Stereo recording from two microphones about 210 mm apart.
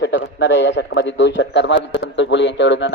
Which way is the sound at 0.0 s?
55° left (ahead or behind).